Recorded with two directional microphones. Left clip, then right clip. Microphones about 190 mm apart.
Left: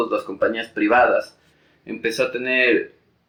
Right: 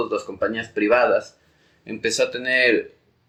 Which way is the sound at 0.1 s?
25° right (ahead or behind).